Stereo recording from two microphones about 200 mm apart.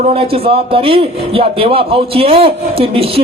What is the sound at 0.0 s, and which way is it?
Speech, 30° right (ahead or behind).